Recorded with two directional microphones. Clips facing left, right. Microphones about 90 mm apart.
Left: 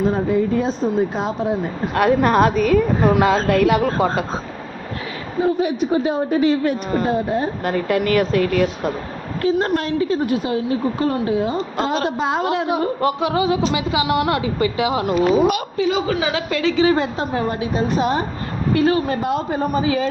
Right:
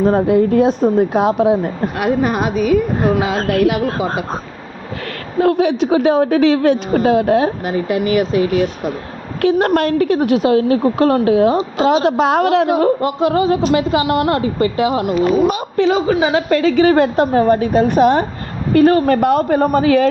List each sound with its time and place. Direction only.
0.0 s speech: 55° right (ahead or behind)
2.0 s speech: 10° right (ahead or behind)
3.3 s speech: 60° right (ahead or behind)
5.4 s a woman's voice: 90° right; by 7.5 s 75° right (ahead or behind)
7.6 s speech: 15° right (ahead or behind)
9.4 s a woman's voice: 70° right (ahead or behind); by 12.7 s 85° right
13.0 s speech: 30° right (ahead or behind)
16.0 s a woman's voice: 40° right (ahead or behind); by 17.2 s 65° right (ahead or behind)
17.3 s speech: 50° right (ahead or behind)
18.7 s speech: 50° right (ahead or behind)